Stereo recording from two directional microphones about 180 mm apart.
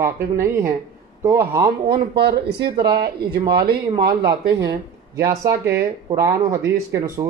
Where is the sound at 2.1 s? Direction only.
65° right (ahead or behind).